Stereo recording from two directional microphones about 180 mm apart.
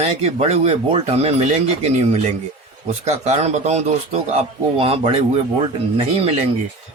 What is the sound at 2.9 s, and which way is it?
A man's voice, 40° right (ahead or behind).